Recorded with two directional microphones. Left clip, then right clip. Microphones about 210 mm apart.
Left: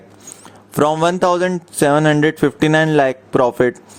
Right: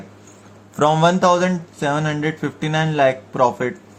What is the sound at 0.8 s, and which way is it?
Speech, 45° left (ahead or behind).